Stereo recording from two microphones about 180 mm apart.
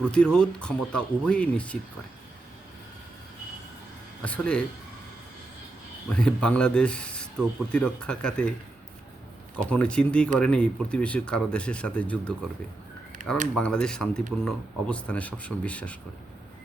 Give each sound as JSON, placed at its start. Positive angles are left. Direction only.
{"t": 0.1, "sound": "speech", "side_deg": 5}
{"t": 4.2, "sound": "speech", "side_deg": 5}
{"t": 6.1, "sound": "speech", "side_deg": 5}
{"t": 9.6, "sound": "speech", "side_deg": 5}
{"t": 13.2, "sound": "speech", "side_deg": -50}
{"t": 13.6, "sound": "speech", "side_deg": 5}